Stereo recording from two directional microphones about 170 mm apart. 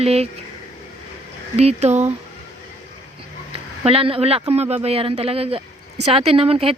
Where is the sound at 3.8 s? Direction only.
35° right (ahead or behind).